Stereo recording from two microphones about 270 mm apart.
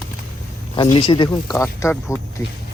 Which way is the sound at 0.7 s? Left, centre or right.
Centre.